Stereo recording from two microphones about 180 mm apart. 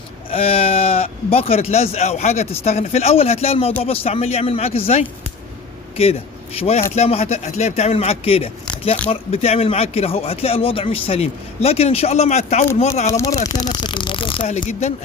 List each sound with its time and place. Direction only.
0.3 s speech: 30° left (ahead or behind)
13.1 s speech: 15° left (ahead or behind); by 14.9 s 40° left (ahead or behind)